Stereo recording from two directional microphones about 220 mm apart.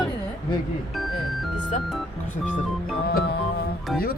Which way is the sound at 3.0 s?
45° left (ahead or behind).